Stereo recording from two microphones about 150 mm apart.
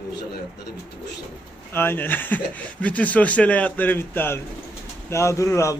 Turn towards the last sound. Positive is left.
turn(degrees=20)  # may be behind; listen again after turning